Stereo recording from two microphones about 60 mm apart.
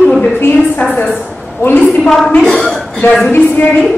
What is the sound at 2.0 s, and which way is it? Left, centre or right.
Speech, centre.